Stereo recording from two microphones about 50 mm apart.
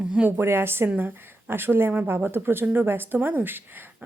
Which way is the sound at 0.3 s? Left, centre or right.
Right.